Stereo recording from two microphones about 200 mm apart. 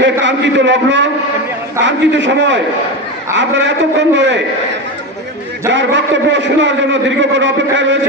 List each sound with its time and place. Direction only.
0.0 s a man's voice: 65° right (ahead or behind)
5.7 s a man's voice: 65° right (ahead or behind)